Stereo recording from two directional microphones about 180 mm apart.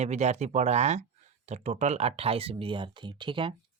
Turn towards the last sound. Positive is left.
turn(degrees=-25)  # may be behind; listen again after turning